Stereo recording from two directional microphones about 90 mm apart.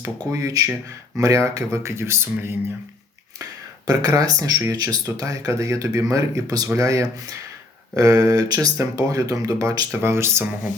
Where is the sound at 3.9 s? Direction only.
40° right (ahead or behind).